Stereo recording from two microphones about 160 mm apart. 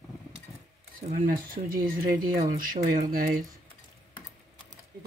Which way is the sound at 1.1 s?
65° right (ahead or behind).